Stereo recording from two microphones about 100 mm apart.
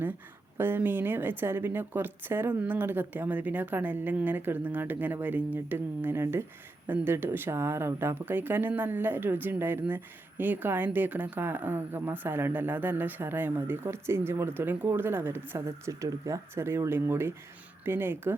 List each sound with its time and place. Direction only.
0.5 s speech: 20° right (ahead or behind)